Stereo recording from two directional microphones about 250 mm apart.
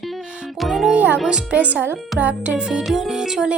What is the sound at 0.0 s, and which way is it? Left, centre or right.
Music, centre.